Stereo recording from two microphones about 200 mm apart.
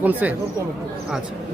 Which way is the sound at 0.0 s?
10° right (ahead or behind).